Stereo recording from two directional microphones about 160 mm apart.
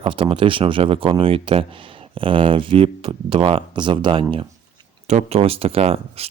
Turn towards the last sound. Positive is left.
turn(degrees=-40)  # may be behind; listen again after turning